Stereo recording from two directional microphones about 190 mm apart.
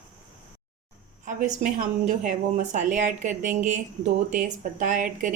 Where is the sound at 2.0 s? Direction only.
40° right (ahead or behind).